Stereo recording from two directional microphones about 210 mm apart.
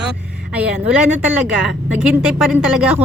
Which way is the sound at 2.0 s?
5° right (ahead or behind).